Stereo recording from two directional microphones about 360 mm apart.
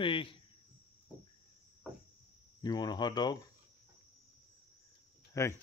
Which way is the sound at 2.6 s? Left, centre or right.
Centre.